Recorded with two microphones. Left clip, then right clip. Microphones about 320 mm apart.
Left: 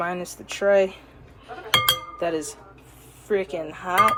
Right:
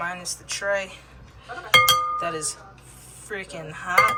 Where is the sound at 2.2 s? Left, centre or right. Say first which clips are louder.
Left 1 dB; centre.